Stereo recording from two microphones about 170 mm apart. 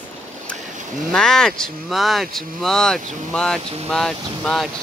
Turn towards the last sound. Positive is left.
turn(degrees=0)  # may be behind; listen again after turning